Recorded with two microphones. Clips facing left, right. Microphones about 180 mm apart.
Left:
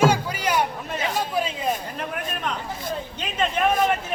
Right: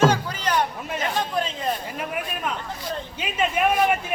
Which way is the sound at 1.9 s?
5° right (ahead or behind).